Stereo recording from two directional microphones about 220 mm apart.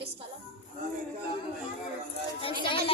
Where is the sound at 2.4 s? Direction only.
25° left (ahead or behind).